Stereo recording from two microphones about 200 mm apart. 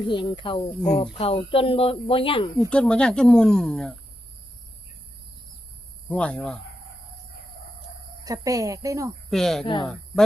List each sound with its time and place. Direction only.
0.1 s speech: 25° left (ahead or behind)
0.8 s speech: 5° left (ahead or behind)
1.2 s speech: 30° left (ahead or behind)
2.6 s speech: 5° left (ahead or behind)
6.1 s speech: 5° left (ahead or behind)
8.2 s a woman's voice: 15° right (ahead or behind)
9.3 s speech: centre (ahead or behind)
9.6 s speech: 20° left (ahead or behind)